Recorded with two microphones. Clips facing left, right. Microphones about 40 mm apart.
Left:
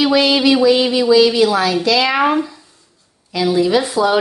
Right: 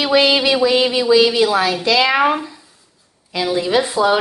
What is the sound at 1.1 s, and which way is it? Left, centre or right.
Speech, right.